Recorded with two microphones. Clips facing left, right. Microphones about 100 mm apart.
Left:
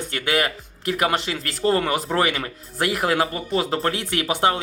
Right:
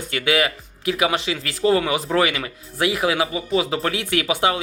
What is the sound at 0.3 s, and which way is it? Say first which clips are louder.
Speech: right 2 dB; 45° left (ahead or behind).